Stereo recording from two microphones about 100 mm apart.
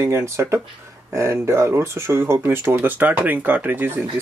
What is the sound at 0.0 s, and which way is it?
Speech, 30° right (ahead or behind).